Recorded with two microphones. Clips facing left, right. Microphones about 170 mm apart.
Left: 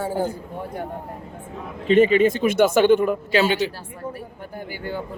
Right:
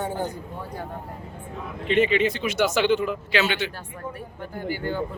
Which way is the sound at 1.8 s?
45° left (ahead or behind).